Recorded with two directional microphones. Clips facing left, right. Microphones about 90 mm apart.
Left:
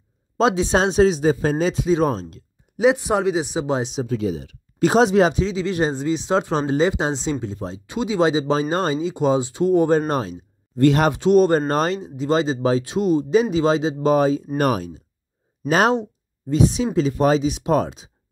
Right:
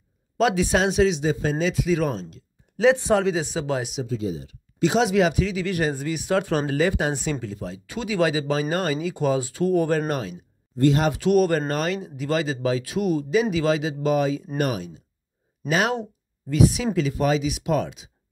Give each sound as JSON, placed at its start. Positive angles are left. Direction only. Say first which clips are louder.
{"t": 0.4, "sound": "speech", "louder": "left 3 dB", "side_deg": 25}
{"t": 2.8, "sound": "speech", "louder": "left 1 dB", "side_deg": 15}
{"t": 4.2, "sound": "speech", "louder": "left 4 dB", "side_deg": 75}
{"t": 4.7, "sound": "speech", "louder": "left 4 dB", "side_deg": 45}
{"t": 10.8, "sound": "speech", "louder": "left 4 dB", "side_deg": 65}
{"t": 11.1, "sound": "speech", "louder": "left 4 dB", "side_deg": 25}
{"t": 16.0, "sound": "speech", "louder": "left 2 dB", "side_deg": 30}